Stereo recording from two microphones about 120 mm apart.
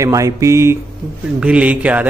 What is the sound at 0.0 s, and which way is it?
Speech, 25° right (ahead or behind).